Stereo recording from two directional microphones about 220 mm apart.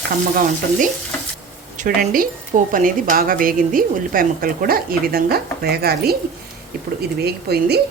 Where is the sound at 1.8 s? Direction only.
40° right (ahead or behind).